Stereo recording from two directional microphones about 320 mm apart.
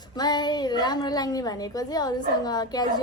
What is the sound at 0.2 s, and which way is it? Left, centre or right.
A woman's voice, centre.